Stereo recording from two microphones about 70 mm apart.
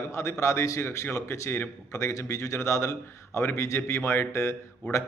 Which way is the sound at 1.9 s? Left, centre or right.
Left.